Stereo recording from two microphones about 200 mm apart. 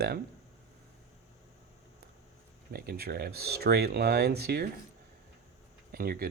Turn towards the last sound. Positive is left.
turn(degrees=-50)  # may be behind; listen again after turning